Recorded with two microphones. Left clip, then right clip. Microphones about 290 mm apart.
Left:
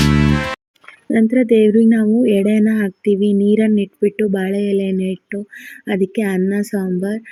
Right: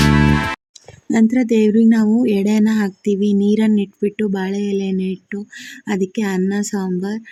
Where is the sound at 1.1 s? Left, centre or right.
Centre.